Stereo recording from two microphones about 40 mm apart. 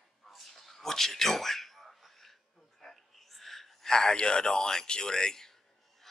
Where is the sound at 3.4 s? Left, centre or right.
Centre.